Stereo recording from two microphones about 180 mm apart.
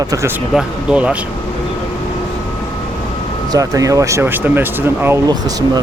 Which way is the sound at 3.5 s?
20° right (ahead or behind).